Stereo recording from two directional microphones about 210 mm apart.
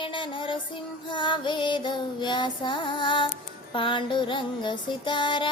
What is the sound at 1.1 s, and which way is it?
Music, 20° left (ahead or behind).